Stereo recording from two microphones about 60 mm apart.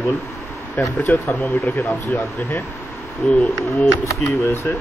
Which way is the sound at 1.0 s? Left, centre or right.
Left.